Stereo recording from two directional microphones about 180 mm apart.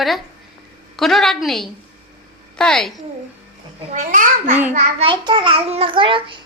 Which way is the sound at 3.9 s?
45° right (ahead or behind).